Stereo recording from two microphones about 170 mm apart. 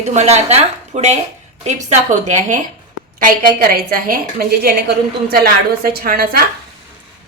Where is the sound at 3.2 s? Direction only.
55° right (ahead or behind).